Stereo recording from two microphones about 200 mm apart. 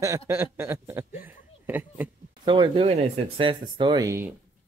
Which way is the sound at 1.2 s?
10° right (ahead or behind).